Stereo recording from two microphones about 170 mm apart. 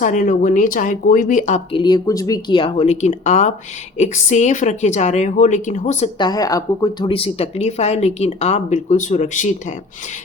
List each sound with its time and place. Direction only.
0.0 s speech: 50° left (ahead or behind)
1.7 s speech: 25° left (ahead or behind); by 6.1 s 40° left (ahead or behind)
6.1 s speech: 25° left (ahead or behind); by 9.7 s 45° left (ahead or behind)